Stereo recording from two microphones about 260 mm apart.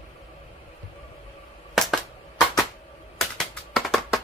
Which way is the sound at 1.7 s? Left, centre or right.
Centre.